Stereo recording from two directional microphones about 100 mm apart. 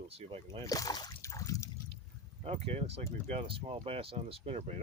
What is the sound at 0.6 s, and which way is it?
Speech, 35° left (ahead or behind).